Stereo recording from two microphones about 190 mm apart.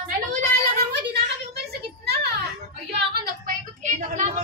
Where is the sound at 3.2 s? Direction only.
45° right (ahead or behind).